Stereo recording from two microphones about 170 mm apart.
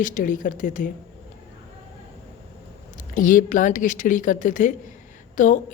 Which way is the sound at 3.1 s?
50° left (ahead or behind).